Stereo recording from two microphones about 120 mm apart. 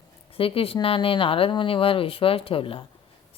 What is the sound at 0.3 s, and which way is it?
A woman's voice, 50° left (ahead or behind).